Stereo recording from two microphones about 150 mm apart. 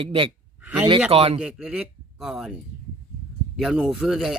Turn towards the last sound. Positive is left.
turn(degrees=0)  # may be behind; listen again after turning